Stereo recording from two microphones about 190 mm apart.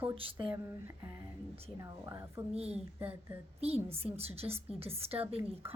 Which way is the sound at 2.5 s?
35° right (ahead or behind).